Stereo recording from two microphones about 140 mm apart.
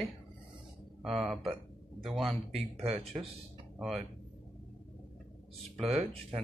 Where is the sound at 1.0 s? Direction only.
Centre (ahead or behind).